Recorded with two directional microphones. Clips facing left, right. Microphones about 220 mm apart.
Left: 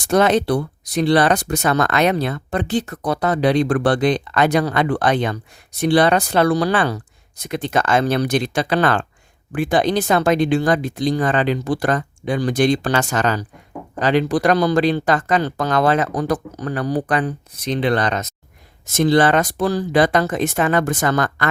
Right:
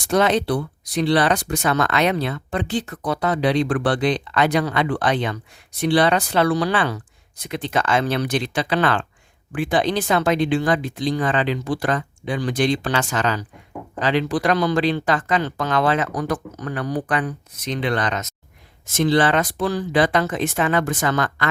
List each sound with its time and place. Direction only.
0.0 s speech: 45° left (ahead or behind)